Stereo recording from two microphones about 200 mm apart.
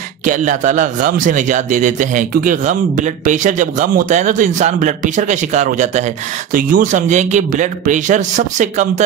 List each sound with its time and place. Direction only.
0.2 s a man's voice: 40° right (ahead or behind)